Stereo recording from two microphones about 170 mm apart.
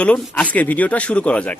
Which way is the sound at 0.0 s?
5° left (ahead or behind).